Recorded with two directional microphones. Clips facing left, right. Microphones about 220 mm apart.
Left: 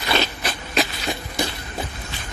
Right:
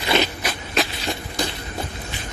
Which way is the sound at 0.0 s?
20° right (ahead or behind).